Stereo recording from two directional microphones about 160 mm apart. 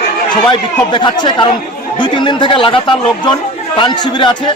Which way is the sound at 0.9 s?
30° left (ahead or behind).